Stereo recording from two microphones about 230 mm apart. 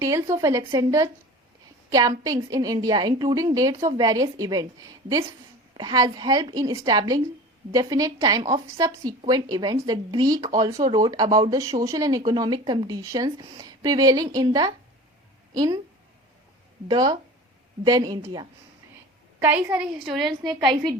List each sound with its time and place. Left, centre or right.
0.3 s speech: centre
16.9 s speech: centre
20.4 s a woman's voice: centre